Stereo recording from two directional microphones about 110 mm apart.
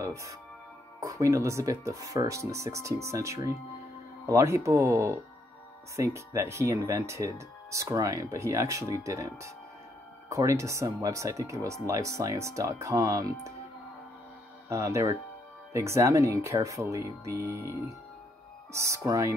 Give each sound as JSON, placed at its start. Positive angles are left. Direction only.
{"t": 0.0, "sound": "speech", "side_deg": -30}
{"t": 14.7, "sound": "speech", "side_deg": -25}